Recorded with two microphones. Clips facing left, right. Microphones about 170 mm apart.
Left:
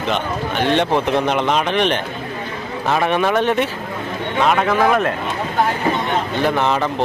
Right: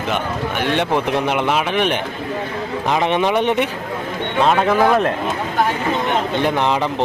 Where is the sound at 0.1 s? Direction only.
10° right (ahead or behind).